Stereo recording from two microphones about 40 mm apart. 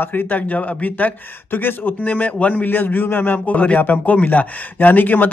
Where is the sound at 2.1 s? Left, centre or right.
Left.